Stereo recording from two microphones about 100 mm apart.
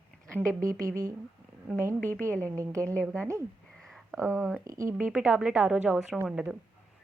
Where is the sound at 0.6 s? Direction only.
30° right (ahead or behind).